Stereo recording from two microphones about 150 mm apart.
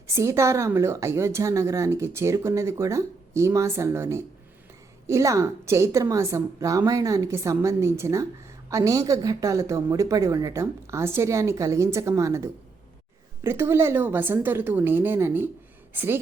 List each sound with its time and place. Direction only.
0.1 s speech: 20° right (ahead or behind)